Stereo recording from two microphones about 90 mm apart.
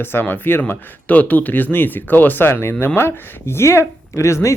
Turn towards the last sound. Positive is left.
turn(degrees=35)  # may be behind; listen again after turning